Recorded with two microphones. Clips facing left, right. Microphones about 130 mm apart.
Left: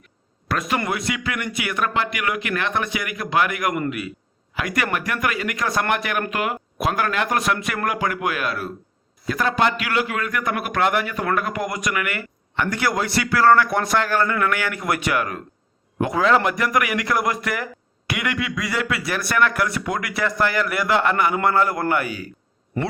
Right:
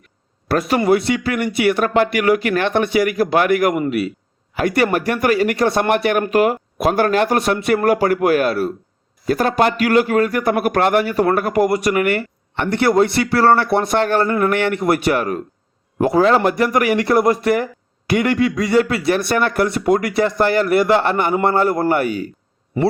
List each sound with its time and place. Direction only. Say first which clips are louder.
0.4 s a man's voice: right 8 dB; 35° right (ahead or behind)